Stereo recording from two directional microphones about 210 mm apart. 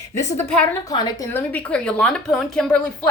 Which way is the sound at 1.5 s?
5° left (ahead or behind).